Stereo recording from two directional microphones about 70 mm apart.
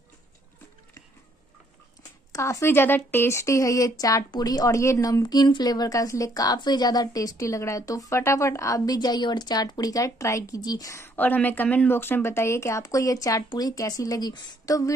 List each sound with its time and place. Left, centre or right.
2.3 s a woman's voice: left
2.7 s speech: left
5.2 s a woman's voice: left
8.2 s a woman's voice: left
10.6 s speech: left
11.1 s a woman's voice: left